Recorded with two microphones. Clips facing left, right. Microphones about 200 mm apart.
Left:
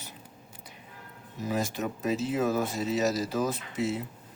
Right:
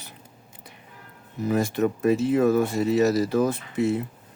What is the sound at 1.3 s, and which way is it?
Speech, 60° right (ahead or behind).